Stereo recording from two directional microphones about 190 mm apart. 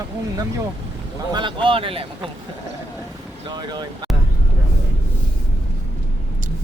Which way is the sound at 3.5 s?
20° right (ahead or behind).